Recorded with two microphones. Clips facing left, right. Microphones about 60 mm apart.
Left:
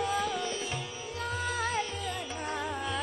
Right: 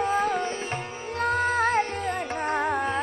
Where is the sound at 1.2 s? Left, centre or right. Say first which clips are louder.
Right 10 dB; right.